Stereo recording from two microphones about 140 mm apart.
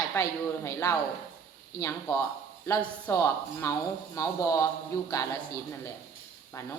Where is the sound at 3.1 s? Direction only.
20° left (ahead or behind).